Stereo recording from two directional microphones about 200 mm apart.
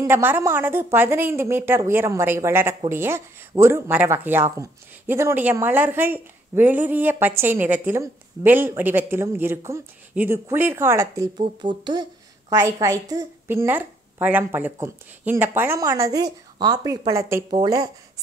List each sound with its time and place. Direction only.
0.0 s a woman's voice: 10° right (ahead or behind)